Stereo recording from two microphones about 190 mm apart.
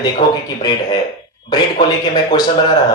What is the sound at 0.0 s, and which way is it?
Speech, 20° left (ahead or behind).